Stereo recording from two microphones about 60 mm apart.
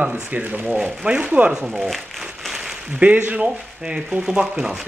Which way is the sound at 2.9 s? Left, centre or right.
Right.